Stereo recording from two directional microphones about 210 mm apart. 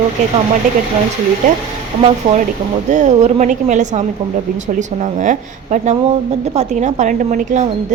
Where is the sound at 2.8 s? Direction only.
35° right (ahead or behind).